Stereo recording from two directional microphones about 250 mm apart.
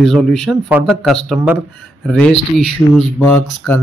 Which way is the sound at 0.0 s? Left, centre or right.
Centre.